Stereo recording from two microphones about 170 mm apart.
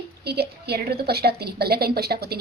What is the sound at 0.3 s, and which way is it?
A woman's voice, 70° right (ahead or behind).